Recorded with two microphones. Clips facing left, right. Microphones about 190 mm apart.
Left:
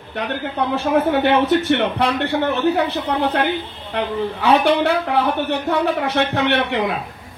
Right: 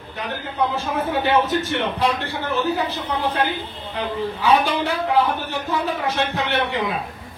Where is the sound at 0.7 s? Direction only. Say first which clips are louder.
Left 6 dB; 65° left (ahead or behind).